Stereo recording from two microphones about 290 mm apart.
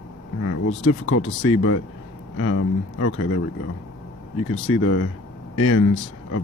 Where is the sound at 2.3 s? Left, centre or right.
Left.